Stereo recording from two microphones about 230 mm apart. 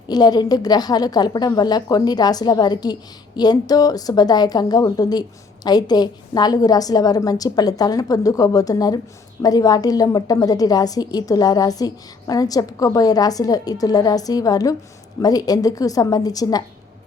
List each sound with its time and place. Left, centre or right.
0.1 s a woman's voice: centre